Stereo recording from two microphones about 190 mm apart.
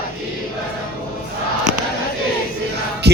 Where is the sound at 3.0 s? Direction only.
60° right (ahead or behind).